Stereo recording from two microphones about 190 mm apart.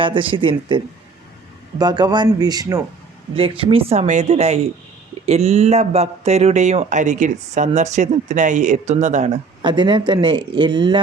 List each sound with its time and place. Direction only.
0.0 s speech: 25° right (ahead or behind)
1.8 s speech: 20° right (ahead or behind)